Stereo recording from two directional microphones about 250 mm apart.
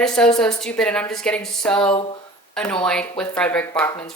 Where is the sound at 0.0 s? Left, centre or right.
Centre.